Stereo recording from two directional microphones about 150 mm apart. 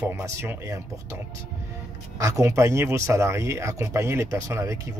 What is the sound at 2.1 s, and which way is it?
Speech, 20° right (ahead or behind).